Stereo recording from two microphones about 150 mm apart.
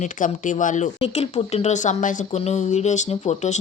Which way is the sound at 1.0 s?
40° left (ahead or behind).